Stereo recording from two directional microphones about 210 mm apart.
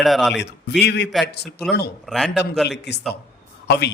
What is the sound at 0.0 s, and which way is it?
Speech, centre (ahead or behind).